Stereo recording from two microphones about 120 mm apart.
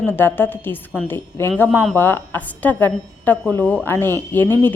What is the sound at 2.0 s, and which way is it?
A woman's voice, 15° left (ahead or behind).